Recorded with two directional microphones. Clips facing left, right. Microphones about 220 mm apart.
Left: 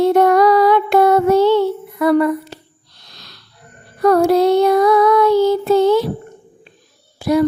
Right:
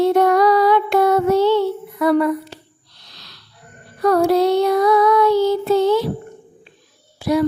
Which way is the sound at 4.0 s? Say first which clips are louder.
Left 3 dB; 50° left (ahead or behind).